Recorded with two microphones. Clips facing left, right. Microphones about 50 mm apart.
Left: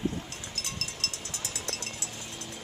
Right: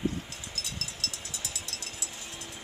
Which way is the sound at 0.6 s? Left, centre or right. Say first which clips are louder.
Left 2 dB; left.